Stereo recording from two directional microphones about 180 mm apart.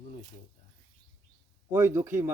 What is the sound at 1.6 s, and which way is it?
Speech, 15° right (ahead or behind).